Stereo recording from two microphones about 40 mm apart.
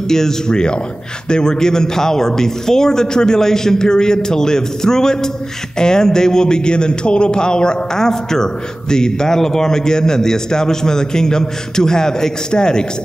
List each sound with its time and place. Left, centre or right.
0.1 s a man's voice: centre